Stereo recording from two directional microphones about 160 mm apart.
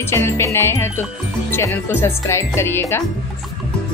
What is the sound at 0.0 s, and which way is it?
Speech, 15° left (ahead or behind).